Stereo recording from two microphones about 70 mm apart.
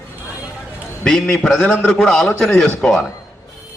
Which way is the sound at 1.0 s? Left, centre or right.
Centre.